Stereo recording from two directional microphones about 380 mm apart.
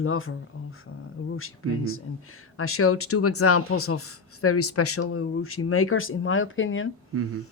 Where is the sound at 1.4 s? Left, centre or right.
Left.